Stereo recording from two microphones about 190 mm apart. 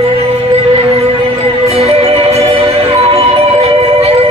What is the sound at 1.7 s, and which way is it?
Music, 35° right (ahead or behind).